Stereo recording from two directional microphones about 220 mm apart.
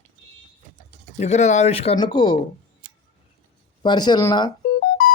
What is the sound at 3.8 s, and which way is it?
Speech, 20° left (ahead or behind).